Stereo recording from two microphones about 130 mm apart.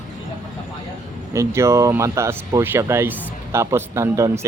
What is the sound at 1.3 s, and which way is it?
Speech, 20° right (ahead or behind).